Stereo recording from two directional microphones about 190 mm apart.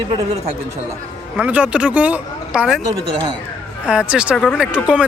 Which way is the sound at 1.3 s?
5° right (ahead or behind).